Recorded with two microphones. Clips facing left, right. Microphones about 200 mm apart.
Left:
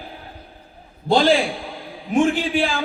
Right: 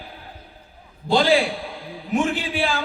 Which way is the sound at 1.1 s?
50° left (ahead or behind).